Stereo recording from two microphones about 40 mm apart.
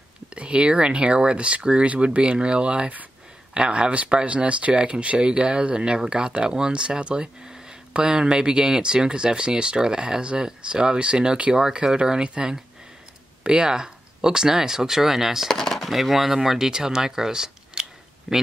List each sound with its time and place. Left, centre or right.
0.3 s speech: right; by 15.5 s centre
15.5 s speech: centre
18.3 s speech: centre